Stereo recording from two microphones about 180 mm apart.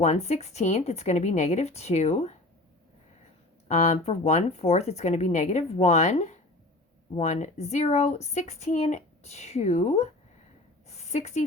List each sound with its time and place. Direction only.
0.0 s speech: 35° left (ahead or behind)
3.7 s speech: 35° left (ahead or behind)
10.8 s a sound: 40° left (ahead or behind)